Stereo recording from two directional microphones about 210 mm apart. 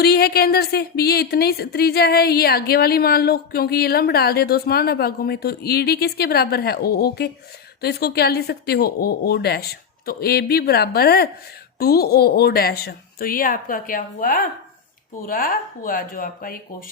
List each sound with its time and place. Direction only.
0.0 s speech: 50° left (ahead or behind)